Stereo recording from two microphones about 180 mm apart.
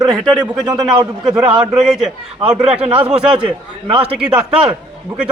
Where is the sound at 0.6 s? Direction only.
20° right (ahead or behind).